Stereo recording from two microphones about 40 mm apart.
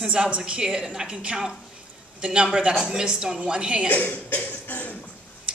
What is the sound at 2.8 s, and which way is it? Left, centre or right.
A woman's voice, centre.